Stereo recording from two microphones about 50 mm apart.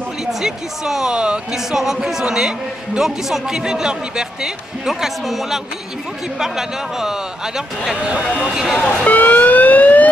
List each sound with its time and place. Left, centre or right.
0.2 s a man's voice: centre
8.4 s a man's voice: centre
8.7 s speech: left